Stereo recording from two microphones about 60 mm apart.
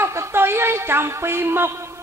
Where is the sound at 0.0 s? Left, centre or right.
Right.